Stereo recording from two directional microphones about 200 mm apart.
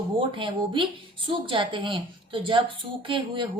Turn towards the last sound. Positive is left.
turn(degrees=-25)  # may be behind; listen again after turning